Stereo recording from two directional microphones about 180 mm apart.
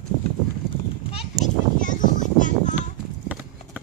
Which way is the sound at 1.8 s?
45° left (ahead or behind).